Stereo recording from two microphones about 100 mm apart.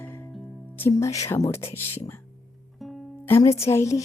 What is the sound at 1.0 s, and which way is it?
Speech, 30° left (ahead or behind).